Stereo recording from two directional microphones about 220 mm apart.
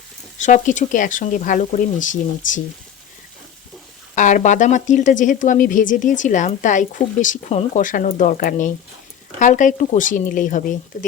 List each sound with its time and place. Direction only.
0.3 s speech: 35° left (ahead or behind)
4.1 s speech: 35° left (ahead or behind)